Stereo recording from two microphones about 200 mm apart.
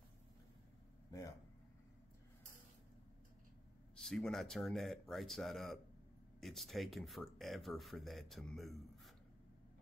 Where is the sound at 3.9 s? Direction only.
5° left (ahead or behind).